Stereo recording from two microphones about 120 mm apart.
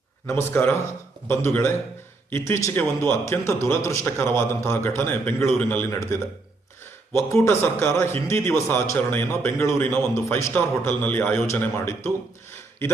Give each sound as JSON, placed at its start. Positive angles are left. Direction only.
{"t": 0.3, "sound": "a man's voice", "side_deg": 20}
{"t": 7.3, "sound": "a man's voice", "side_deg": 20}